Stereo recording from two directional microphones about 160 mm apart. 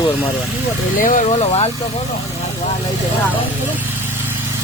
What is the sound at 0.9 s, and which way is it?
Speech, 55° left (ahead or behind).